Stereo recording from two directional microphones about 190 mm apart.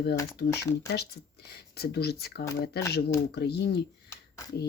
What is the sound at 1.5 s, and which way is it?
Speech, 60° left (ahead or behind).